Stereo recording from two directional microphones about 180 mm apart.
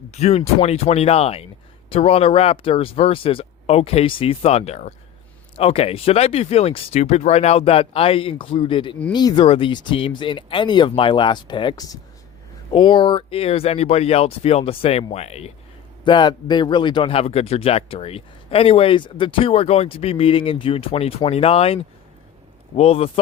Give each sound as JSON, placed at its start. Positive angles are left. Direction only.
{"t": 0.1, "sound": "a man's voice", "side_deg": 35}
{"t": 16.0, "sound": "a man's voice", "side_deg": 25}